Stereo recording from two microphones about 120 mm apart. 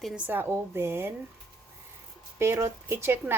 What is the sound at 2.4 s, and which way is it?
Speech, 20° right (ahead or behind).